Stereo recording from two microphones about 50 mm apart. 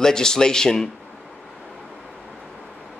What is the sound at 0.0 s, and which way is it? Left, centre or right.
Speech, centre.